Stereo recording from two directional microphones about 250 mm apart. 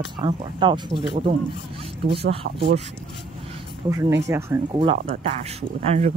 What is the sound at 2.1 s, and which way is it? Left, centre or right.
Speech, right.